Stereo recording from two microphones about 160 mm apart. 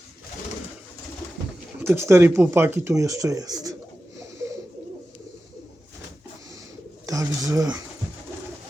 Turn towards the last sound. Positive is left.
turn(degrees=-20)  # may be behind; listen again after turning